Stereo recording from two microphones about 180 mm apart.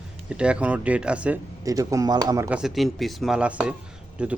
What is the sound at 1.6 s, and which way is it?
Speech, 20° right (ahead or behind).